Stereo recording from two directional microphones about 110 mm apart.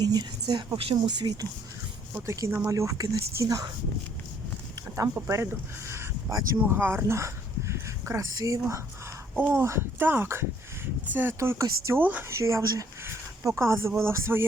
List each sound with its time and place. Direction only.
0.0 s a woman's voice: 40° right (ahead or behind)
2.1 s speech: 30° right (ahead or behind)
4.9 s speech: 25° right (ahead or behind)
11.9 s speech: 15° right (ahead or behind)
12.3 s speech: 25° right (ahead or behind)